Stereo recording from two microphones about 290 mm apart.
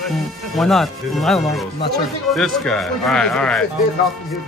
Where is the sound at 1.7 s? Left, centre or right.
Left.